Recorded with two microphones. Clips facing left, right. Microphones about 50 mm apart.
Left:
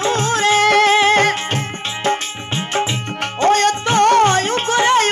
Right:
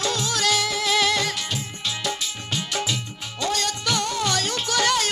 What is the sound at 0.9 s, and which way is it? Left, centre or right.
Music, left.